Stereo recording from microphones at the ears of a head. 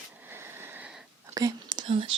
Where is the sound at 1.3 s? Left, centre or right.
Right.